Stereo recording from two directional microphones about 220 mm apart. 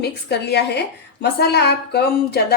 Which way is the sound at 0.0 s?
50° left (ahead or behind).